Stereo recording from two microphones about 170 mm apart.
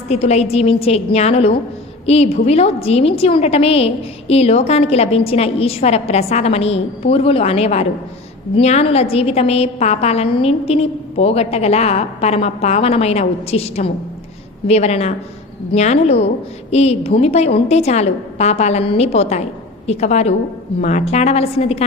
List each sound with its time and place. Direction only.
0.1 s a woman's voice: 40° left (ahead or behind)